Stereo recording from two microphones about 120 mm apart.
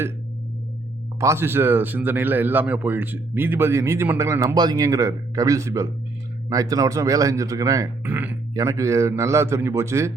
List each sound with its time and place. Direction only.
1.2 s speech: 20° right (ahead or behind)
8.0 s speech: 15° right (ahead or behind)
8.5 s speech: 25° right (ahead or behind)